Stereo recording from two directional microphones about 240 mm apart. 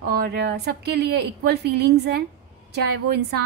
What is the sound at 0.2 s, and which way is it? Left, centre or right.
A woman's voice, right.